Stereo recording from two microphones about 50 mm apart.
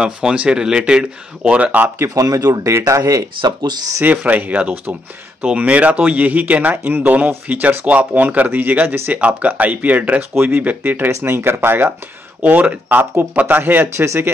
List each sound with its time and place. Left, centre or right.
0.0 s speech: centre
1.6 s speech: right
2.0 s speech: right
4.1 s speech: right
11.1 s speech: right
12.4 s speech: right
13.9 s a man's voice: right